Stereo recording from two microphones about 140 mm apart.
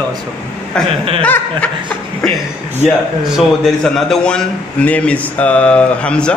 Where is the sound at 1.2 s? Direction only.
10° left (ahead or behind).